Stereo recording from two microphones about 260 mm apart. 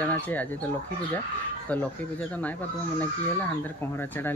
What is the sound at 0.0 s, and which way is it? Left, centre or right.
Speech, centre.